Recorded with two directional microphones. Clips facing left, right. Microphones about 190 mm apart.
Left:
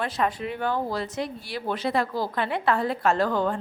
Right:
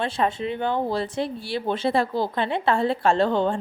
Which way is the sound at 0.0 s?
25° right (ahead or behind).